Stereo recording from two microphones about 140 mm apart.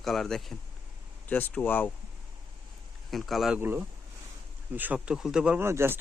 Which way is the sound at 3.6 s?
15° right (ahead or behind).